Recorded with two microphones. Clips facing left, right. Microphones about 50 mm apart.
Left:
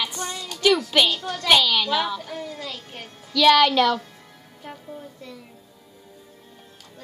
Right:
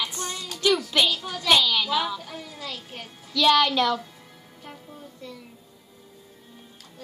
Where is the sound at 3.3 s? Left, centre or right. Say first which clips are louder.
Left 4 dB; left.